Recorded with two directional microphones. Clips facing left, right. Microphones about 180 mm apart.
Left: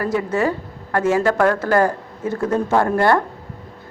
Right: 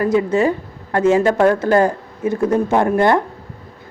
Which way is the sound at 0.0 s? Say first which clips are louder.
Right 4 dB; 20° right (ahead or behind).